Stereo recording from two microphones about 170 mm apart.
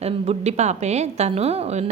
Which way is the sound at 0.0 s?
40° right (ahead or behind).